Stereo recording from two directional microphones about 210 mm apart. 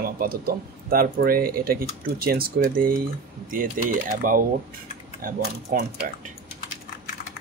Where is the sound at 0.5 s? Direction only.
45° right (ahead or behind).